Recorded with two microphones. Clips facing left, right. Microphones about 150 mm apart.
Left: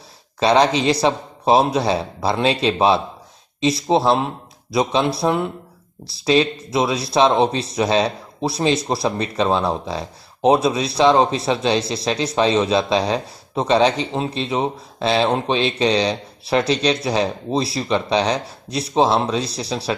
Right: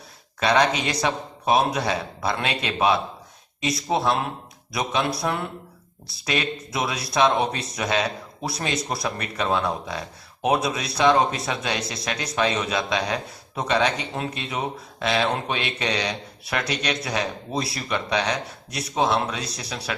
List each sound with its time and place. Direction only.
0.3 s speech: 30° left (ahead or behind)